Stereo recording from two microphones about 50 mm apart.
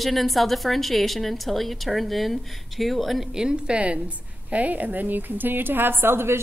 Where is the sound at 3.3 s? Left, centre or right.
Centre.